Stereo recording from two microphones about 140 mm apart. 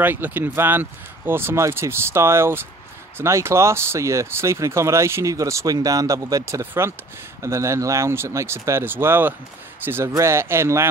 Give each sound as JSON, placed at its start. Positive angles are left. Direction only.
{"t": 0.0, "sound": "speech", "side_deg": -15}